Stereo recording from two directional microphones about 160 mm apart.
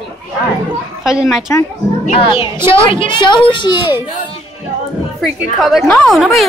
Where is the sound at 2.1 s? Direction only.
35° left (ahead or behind).